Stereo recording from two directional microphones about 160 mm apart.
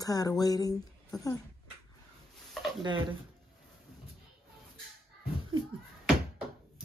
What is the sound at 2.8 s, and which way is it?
Speech, 30° right (ahead or behind).